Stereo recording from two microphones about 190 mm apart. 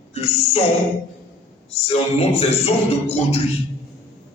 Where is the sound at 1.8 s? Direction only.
30° left (ahead or behind).